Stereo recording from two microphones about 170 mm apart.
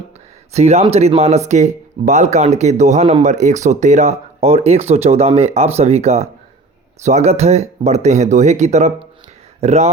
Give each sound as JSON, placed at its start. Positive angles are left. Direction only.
{"t": 0.5, "sound": "speech", "side_deg": -40}